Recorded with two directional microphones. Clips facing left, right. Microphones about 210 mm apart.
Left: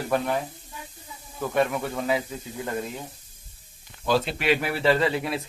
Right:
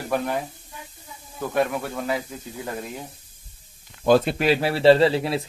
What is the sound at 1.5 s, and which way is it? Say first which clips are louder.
Speech: right 1 dB; 5° right (ahead or behind).